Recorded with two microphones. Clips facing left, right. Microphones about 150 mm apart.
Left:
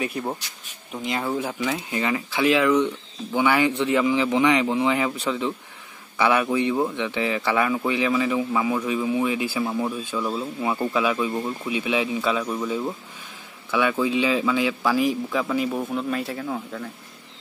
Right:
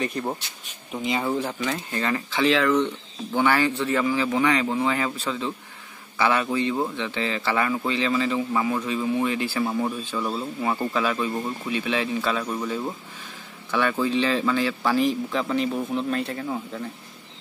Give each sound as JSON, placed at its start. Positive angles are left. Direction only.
{"t": 0.0, "sound": "speech", "side_deg": 5}
{"t": 9.7, "sound": "speech", "side_deg": 0}
{"t": 13.7, "sound": "speech", "side_deg": 10}